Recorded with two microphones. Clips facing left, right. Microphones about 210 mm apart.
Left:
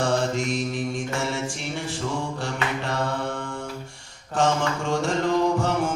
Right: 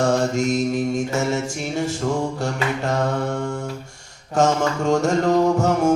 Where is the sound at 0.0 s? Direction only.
45° right (ahead or behind).